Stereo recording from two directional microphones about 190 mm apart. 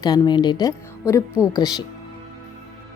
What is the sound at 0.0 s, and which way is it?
A woman's voice, 20° left (ahead or behind).